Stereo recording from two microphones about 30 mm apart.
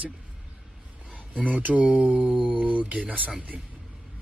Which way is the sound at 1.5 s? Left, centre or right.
Right.